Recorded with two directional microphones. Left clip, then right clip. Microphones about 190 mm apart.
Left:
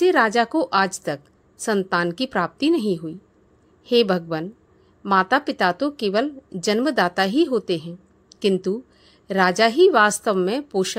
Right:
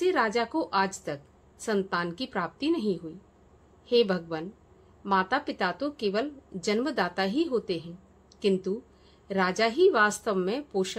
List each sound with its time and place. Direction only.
0.0 s a woman's voice: 35° left (ahead or behind)